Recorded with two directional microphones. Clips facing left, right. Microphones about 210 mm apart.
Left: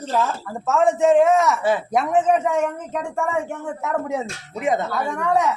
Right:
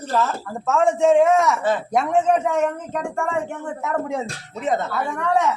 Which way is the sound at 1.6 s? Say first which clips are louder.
Even; 10° left (ahead or behind).